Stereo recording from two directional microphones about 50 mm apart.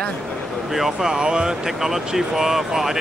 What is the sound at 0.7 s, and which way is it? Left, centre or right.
Speech, centre.